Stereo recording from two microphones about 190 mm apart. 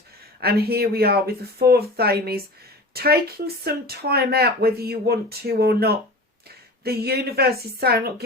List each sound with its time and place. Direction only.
0.3 s speech: 55° right (ahead or behind)